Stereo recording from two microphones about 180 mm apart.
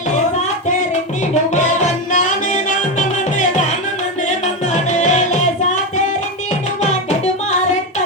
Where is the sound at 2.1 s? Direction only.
45° left (ahead or behind).